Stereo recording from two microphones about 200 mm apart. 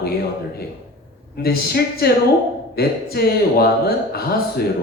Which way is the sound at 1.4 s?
50° left (ahead or behind).